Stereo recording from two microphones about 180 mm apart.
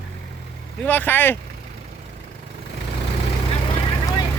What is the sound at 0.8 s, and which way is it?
Speech, 10° left (ahead or behind).